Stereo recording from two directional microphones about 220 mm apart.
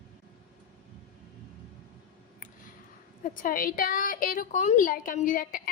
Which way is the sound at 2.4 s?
35° left (ahead or behind).